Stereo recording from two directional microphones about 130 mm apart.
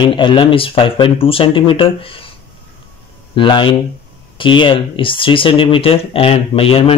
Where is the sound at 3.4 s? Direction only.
40° left (ahead or behind).